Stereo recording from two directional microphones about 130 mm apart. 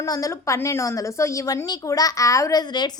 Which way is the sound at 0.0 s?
25° left (ahead or behind).